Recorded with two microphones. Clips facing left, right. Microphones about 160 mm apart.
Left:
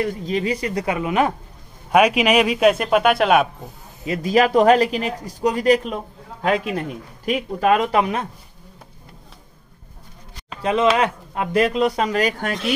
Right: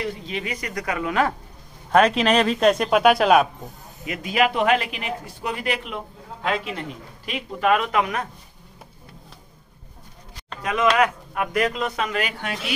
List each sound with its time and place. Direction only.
0.0 s a man's voice: 35° left (ahead or behind); by 3.4 s centre (ahead or behind)
4.0 s speech: 35° left (ahead or behind)
10.6 s speech: 30° left (ahead or behind)